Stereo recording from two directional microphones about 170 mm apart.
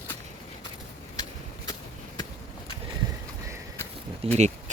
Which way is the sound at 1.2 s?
25° left (ahead or behind).